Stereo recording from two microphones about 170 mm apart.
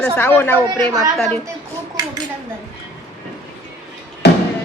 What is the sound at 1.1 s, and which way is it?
Speech, 5° left (ahead or behind).